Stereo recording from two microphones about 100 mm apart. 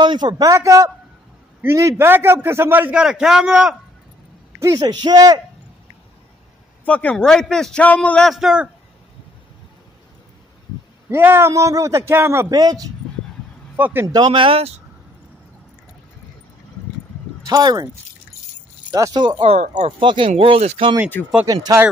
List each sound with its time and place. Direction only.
0.0 s a man's voice: 50° right (ahead or behind); by 3.0 s 20° right (ahead or behind)
3.0 s a man's voice: 5° right (ahead or behind)
4.7 s a man's voice: 45° right (ahead or behind)
6.8 s a man's voice: 15° left (ahead or behind)
8.3 s speech: 5° right (ahead or behind)
11.1 s a man's voice: 25° right (ahead or behind)
12.4 s a man's voice: 40° right (ahead or behind)
13.7 s speech: 15° right (ahead or behind)
14.0 s speech: 45° right (ahead or behind); by 14.7 s 65° right (ahead or behind)
17.5 s a man's voice: 40° right (ahead or behind)
18.9 s speech: 35° right (ahead or behind)
19.1 s speech: 50° right (ahead or behind)
19.4 s speech: 90° right
20.1 s speech: 60° right (ahead or behind); by 20.9 s 85° right